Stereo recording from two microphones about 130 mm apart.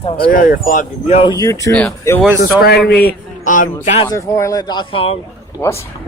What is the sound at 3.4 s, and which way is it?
Speech, 85° left.